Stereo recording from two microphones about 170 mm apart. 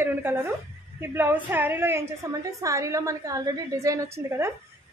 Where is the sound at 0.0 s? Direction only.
15° right (ahead or behind).